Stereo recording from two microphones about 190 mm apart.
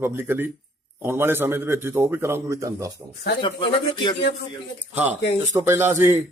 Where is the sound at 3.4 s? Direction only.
25° left (ahead or behind).